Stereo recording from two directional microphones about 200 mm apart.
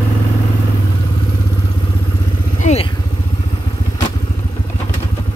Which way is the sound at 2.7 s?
35° left (ahead or behind).